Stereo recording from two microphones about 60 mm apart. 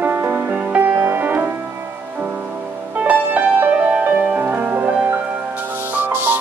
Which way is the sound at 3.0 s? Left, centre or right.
Right.